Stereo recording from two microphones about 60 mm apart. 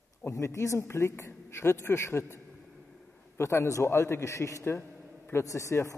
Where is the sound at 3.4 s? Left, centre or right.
Left.